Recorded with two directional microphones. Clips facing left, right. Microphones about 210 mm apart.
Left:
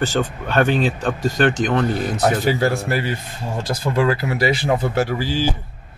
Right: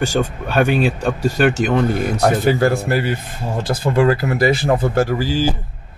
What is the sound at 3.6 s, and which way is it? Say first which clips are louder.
Speech: right 4 dB; 55° right (ahead or behind).